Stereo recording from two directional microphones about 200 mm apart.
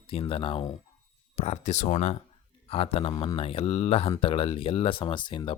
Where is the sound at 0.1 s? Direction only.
30° left (ahead or behind).